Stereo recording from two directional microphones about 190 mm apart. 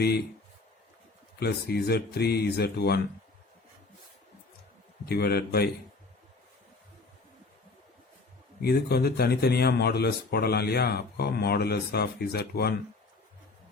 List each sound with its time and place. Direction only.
1.4 s speech: 55° left (ahead or behind)
5.0 s speech: 55° left (ahead or behind)
8.6 s speech: 55° left (ahead or behind)